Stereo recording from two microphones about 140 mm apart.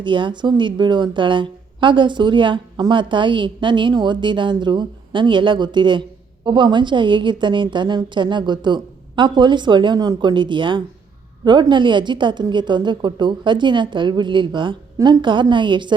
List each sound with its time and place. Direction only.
0.0 s a woman's voice: 35° right (ahead or behind)